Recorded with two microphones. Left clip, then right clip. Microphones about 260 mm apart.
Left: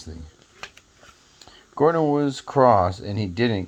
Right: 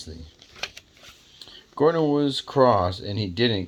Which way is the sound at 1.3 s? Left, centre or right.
Left.